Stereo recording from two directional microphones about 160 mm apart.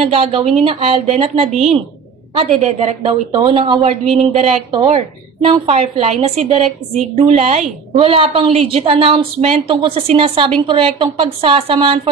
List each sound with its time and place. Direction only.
0.0 s a woman's voice: 35° right (ahead or behind)
1.5 s a woman's voice: centre (ahead or behind)
2.3 s a woman's voice: 40° right (ahead or behind)